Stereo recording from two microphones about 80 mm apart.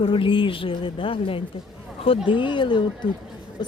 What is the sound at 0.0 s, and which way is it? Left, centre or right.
Speech, left.